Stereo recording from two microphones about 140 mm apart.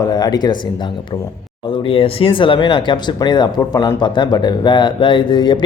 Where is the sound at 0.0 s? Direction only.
25° left (ahead or behind).